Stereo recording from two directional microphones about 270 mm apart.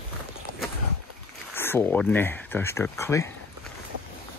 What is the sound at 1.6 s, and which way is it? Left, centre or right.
Speech, centre.